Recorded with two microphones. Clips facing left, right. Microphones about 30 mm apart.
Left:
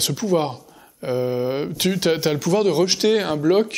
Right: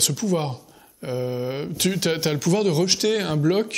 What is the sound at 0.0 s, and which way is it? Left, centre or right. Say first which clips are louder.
Speech: left 3 dB; centre.